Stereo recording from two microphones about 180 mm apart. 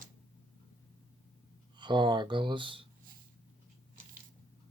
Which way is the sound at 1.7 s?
25° right (ahead or behind).